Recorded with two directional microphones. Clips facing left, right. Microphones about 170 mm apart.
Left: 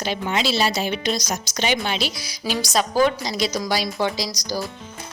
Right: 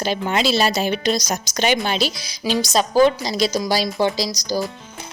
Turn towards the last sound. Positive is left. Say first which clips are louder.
# right 4 dB
turn(degrees=-30)  # may be behind; listen again after turning